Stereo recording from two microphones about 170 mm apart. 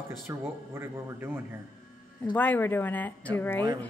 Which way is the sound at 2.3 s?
10° left (ahead or behind).